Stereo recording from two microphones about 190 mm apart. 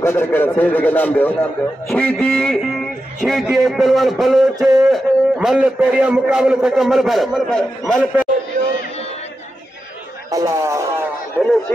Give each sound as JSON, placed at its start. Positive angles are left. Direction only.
{"t": 0.0, "sound": "a man's voice", "side_deg": 10}
{"t": 4.6, "sound": "speech", "side_deg": -20}
{"t": 4.8, "sound": "a man's voice", "side_deg": -5}
{"t": 10.3, "sound": "speech", "side_deg": -15}